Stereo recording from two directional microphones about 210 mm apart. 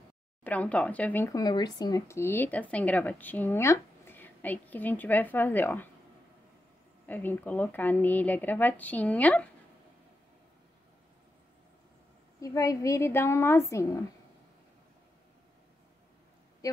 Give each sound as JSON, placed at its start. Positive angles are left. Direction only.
{"t": 0.4, "sound": "speech", "side_deg": 5}
{"t": 7.1, "sound": "speech", "side_deg": 10}
{"t": 12.4, "sound": "speech", "side_deg": 15}
{"t": 16.6, "sound": "speech", "side_deg": 15}